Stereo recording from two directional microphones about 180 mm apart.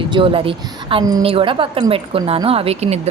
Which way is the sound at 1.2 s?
30° right (ahead or behind).